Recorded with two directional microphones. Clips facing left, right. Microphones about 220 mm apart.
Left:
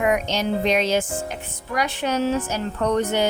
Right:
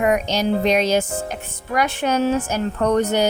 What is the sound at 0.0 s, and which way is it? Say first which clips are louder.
Speech: right 3 dB; 40° right (ahead or behind).